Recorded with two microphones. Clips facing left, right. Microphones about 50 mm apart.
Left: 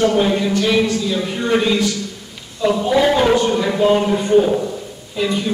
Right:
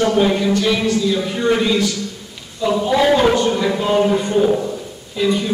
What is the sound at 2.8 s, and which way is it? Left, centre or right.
Speech, centre.